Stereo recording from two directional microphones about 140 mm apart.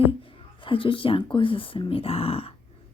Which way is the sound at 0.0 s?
40° left (ahead or behind).